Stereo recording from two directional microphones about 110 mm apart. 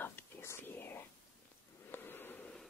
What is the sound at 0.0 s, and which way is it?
Whispering, 20° left (ahead or behind).